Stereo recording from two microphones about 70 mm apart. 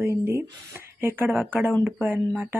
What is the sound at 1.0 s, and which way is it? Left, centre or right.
A woman's voice, right.